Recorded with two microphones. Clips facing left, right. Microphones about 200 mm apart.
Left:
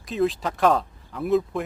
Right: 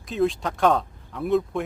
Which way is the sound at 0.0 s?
Centre (ahead or behind).